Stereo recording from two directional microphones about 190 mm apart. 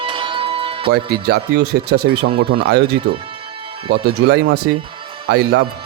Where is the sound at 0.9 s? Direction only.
55° right (ahead or behind).